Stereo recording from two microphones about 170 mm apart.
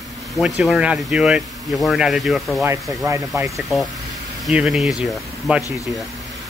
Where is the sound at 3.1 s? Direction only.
15° right (ahead or behind).